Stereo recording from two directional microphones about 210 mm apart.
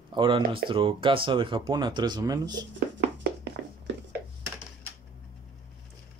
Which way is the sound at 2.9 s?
55° right (ahead or behind).